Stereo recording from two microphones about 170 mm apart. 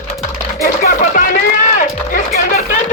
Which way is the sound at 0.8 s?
50° left (ahead or behind).